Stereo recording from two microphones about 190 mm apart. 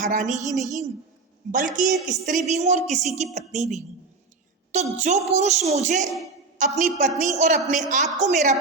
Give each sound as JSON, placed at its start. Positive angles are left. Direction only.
{"t": 0.0, "sound": "a woman's voice", "side_deg": -40}